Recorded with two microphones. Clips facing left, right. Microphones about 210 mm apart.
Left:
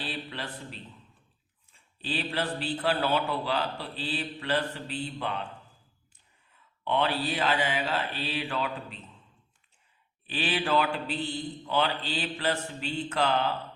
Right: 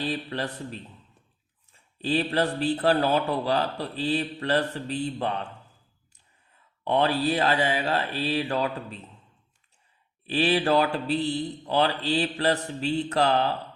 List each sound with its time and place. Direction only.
0.0 s a man's voice: 45° right (ahead or behind)
6.8 s a man's voice: 40° right (ahead or behind)
10.2 s a man's voice: 40° right (ahead or behind)